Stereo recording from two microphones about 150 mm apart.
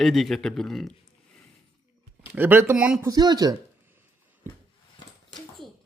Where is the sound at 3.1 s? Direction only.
25° right (ahead or behind).